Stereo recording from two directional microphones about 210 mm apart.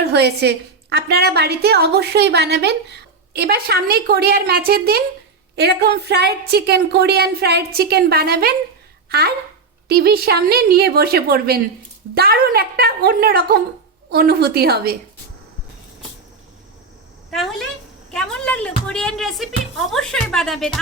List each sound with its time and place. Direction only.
0.1 s a woman's voice: 50° right (ahead or behind)
17.3 s a woman's voice: centre (ahead or behind)